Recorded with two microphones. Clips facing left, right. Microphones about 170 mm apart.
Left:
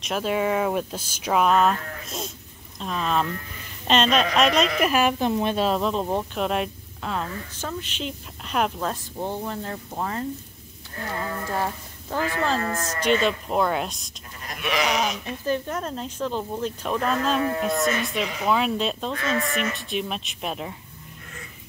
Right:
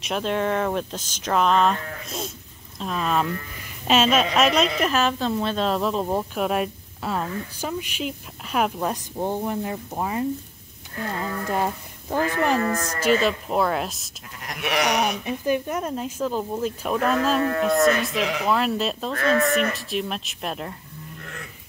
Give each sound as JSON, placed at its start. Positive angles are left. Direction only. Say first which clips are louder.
{"t": 0.0, "sound": "speech", "louder": "even", "side_deg": 5}
{"t": 4.7, "sound": "speech", "louder": "left 1 dB", "side_deg": 10}
{"t": 5.7, "sound": "speech", "louder": "even", "side_deg": 0}
{"t": 8.7, "sound": "speech", "louder": "right 2 dB", "side_deg": -15}
{"t": 11.1, "sound": "a sound", "louder": "right 2 dB", "side_deg": -20}
{"t": 13.0, "sound": "speech", "louder": "right 1 dB", "side_deg": -5}
{"t": 14.4, "sound": "sheep", "louder": "right 1 dB", "side_deg": -75}
{"t": 15.2, "sound": "speech", "louder": "right 3 dB", "side_deg": -15}
{"t": 19.1, "sound": "speech", "louder": "right 8 dB", "side_deg": -45}
{"t": 19.7, "sound": "speech", "louder": "right 1 dB", "side_deg": 0}